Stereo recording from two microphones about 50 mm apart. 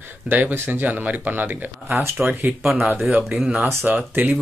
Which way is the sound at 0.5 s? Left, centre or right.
Right.